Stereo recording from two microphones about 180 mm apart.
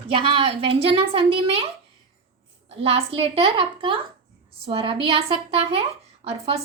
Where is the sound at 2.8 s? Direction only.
35° right (ahead or behind).